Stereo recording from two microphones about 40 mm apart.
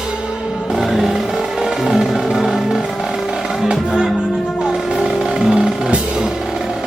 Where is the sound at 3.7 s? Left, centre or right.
Centre.